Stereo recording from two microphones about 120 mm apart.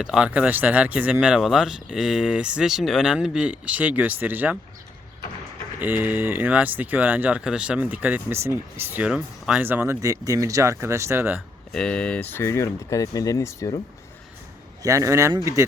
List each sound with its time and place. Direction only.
0.0 s speech: 10° right (ahead or behind)
5.8 s speech: 20° right (ahead or behind)
11.7 s speech: 5° left (ahead or behind); by 13.7 s 25° left (ahead or behind)
14.8 s speech: 25° right (ahead or behind)